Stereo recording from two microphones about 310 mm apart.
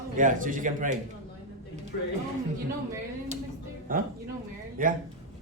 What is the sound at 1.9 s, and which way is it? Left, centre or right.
Speech, left.